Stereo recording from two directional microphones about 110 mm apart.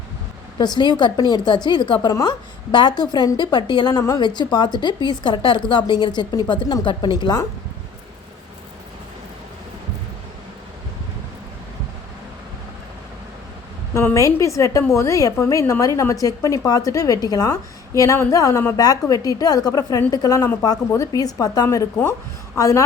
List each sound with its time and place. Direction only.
0.6 s a woman's voice: 40° left (ahead or behind)
13.9 s a woman's voice: 25° left (ahead or behind)